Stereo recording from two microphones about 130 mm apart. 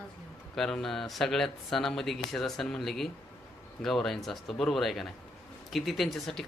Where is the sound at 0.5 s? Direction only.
Centre (ahead or behind).